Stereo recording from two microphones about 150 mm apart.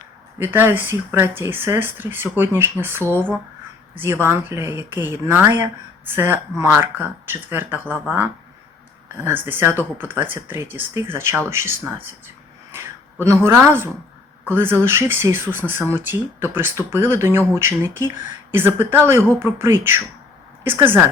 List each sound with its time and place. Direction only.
0.3 s speech: 15° right (ahead or behind)
9.2 s speech: 15° right (ahead or behind)